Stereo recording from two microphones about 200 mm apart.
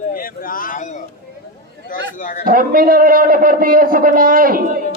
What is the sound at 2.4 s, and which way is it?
A man's voice, 45° right (ahead or behind).